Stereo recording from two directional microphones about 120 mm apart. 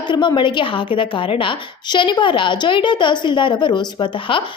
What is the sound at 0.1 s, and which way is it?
A woman's voice, 40° left (ahead or behind).